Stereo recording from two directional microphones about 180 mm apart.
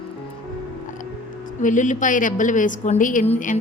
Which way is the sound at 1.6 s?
45° left (ahead or behind).